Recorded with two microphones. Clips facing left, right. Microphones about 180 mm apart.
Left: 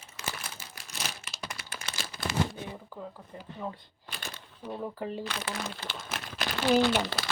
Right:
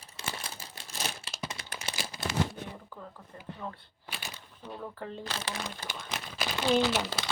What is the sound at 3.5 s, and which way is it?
Speech, 15° left (ahead or behind).